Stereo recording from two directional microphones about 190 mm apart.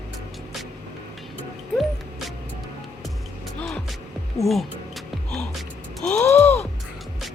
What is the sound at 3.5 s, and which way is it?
Music, 5° left (ahead or behind).